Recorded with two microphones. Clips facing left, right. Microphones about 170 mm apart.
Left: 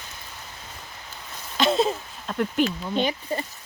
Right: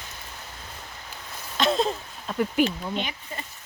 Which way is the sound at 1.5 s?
Centre (ahead or behind).